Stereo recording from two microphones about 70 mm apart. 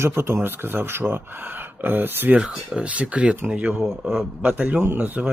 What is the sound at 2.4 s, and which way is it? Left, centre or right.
Speech, centre.